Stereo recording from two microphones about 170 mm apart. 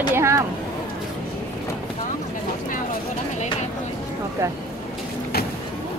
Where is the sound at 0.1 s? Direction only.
15° right (ahead or behind).